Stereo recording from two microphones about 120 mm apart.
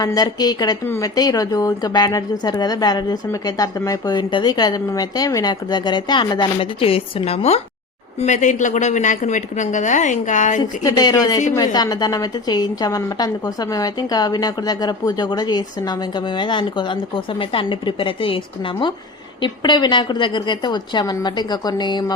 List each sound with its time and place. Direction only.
0.0 s a woman's voice: 35° left (ahead or behind)
6.7 s speech: 50° left (ahead or behind)
8.2 s a woman's voice: 85° left
10.6 s a woman's voice: 35° left (ahead or behind)